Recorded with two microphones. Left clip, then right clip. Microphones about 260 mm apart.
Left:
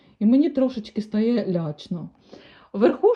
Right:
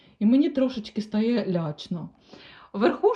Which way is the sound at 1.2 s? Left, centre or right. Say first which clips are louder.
Left 3 dB; centre.